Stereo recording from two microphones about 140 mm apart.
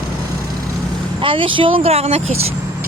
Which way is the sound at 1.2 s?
40° right (ahead or behind).